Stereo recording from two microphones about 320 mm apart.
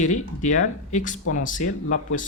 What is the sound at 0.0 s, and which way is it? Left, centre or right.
Speech, left.